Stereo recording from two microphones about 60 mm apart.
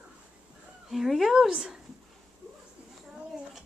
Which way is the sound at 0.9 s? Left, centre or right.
Centre.